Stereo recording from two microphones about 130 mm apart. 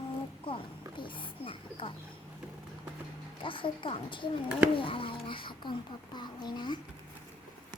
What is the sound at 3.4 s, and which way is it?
A child's voice, 40° left (ahead or behind).